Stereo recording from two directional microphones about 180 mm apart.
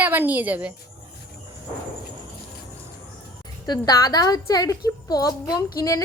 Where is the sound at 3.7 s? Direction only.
20° left (ahead or behind).